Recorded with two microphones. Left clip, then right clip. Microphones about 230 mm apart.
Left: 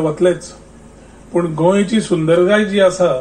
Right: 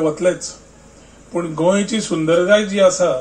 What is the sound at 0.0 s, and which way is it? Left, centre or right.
Speech, right.